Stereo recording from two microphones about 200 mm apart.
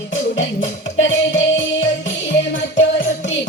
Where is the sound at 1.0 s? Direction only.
70° left (ahead or behind).